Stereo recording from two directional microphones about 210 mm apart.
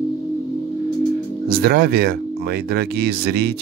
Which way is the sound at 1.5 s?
45° right (ahead or behind).